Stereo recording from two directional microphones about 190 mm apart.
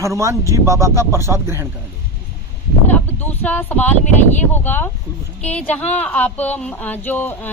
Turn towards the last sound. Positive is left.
turn(degrees=10)  # may be behind; listen again after turning